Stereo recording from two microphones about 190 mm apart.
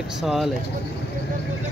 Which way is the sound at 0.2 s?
Centre (ahead or behind).